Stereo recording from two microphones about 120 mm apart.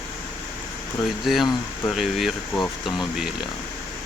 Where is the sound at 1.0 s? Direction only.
Centre (ahead or behind).